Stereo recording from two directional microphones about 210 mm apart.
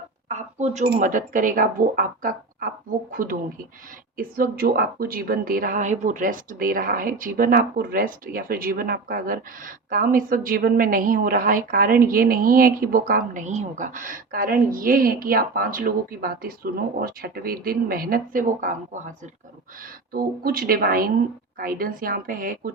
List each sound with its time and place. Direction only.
0.3 s a woman's voice: 35° right (ahead or behind)
20.1 s speech: 45° right (ahead or behind)